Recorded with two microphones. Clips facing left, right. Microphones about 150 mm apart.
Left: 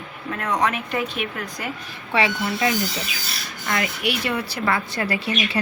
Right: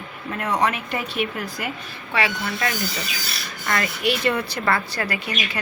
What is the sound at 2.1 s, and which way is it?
Speech, 20° left (ahead or behind).